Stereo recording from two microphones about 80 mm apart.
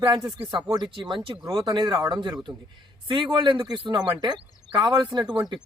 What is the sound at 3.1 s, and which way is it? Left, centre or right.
Speech, right.